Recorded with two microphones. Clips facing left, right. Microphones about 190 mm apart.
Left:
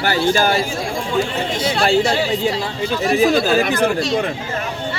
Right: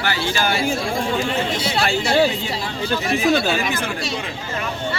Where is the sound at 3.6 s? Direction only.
60° left (ahead or behind).